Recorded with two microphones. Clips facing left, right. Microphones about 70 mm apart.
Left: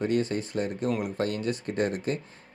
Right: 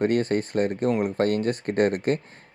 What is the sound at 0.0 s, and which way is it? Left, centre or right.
Speech, right.